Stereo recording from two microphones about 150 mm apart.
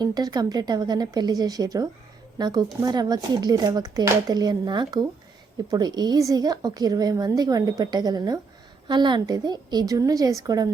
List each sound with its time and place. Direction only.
0.0 s a woman's voice: 25° right (ahead or behind)